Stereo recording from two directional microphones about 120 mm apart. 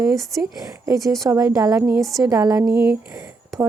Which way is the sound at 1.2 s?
20° right (ahead or behind).